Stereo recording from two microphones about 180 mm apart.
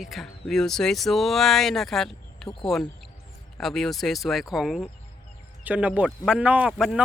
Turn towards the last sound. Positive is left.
turn(degrees=-5)  # may be behind; listen again after turning